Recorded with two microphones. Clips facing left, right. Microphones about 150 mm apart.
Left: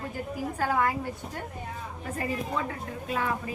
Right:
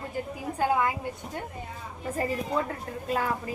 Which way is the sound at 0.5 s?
15° right (ahead or behind).